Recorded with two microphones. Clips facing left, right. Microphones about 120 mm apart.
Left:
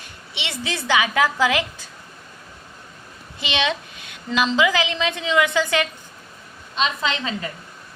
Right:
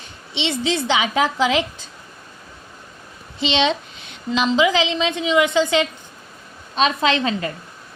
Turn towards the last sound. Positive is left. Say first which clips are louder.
# right 6 dB
turn(degrees=-60)  # may be behind; listen again after turning